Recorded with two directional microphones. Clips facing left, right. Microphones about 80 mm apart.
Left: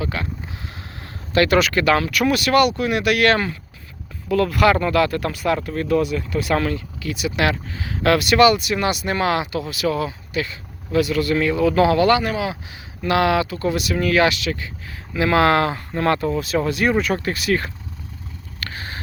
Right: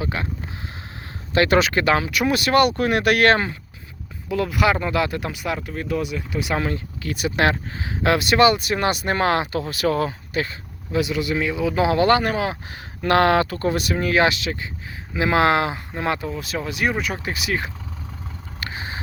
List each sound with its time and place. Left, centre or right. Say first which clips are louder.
0.0 s speech: left 1 dB; right
1.3 s speech: left 1 dB; right
3.3 s speech: left 1 dB; right
4.3 s speech: left 4 dB; centre
6.7 s speech: left 1 dB; right
10.9 s speech: left 3 dB; centre
11.9 s speech: left 1 dB; right; by 17.7 s centre
18.6 s a sound: right 1 dB; centre